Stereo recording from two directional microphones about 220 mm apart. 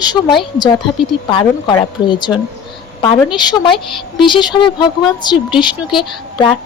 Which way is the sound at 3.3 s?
20° left (ahead or behind).